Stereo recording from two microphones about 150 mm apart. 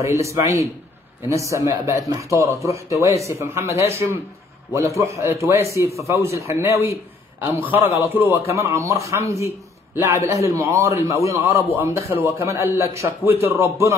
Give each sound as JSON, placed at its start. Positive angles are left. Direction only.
{"t": 0.0, "sound": "a man's voice", "side_deg": -20}